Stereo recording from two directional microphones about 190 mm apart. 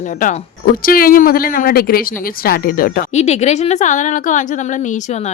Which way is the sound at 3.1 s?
35° left (ahead or behind).